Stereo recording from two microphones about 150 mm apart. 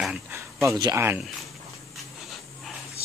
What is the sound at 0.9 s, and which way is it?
Speech, 15° right (ahead or behind).